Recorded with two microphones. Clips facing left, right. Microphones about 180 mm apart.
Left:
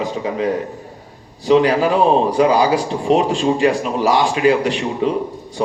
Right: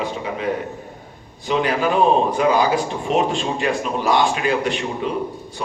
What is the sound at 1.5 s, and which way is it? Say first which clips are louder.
Speech: left 6 dB; 35° left (ahead or behind).